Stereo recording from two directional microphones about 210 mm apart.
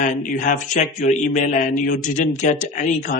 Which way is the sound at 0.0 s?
40° left (ahead or behind).